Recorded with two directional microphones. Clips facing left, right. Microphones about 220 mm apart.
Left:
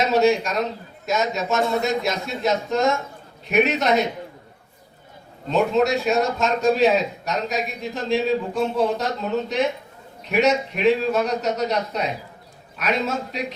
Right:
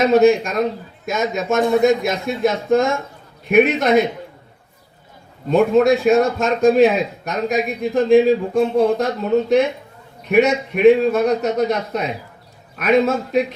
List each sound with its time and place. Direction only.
0.0 s a man's voice: 55° right (ahead or behind)
5.5 s a man's voice: 55° right (ahead or behind)
10.2 s a man's voice: 55° right (ahead or behind)